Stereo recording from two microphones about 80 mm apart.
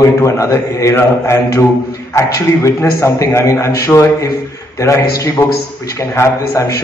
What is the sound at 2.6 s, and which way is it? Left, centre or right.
A man's voice, left.